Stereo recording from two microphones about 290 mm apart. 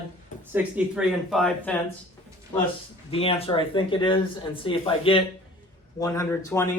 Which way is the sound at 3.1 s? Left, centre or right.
Centre.